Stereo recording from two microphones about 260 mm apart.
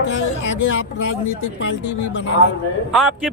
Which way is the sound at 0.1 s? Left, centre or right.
Left.